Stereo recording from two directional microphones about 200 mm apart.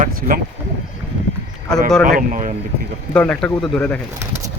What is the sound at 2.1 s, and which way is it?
Speech, 40° right (ahead or behind).